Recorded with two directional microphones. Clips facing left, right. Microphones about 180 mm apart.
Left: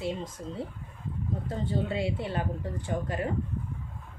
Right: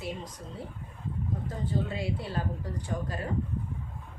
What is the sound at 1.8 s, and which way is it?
Speech, 25° left (ahead or behind).